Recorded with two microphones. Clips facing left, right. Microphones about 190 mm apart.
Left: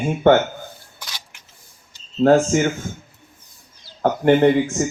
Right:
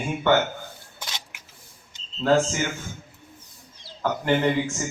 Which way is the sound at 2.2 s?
55° left (ahead or behind).